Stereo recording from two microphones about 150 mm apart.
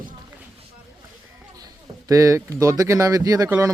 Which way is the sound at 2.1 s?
20° right (ahead or behind).